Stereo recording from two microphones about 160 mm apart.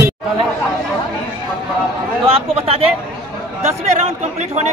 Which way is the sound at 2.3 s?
40° right (ahead or behind).